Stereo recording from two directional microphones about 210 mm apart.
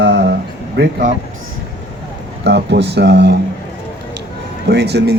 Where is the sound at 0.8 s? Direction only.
45° right (ahead or behind).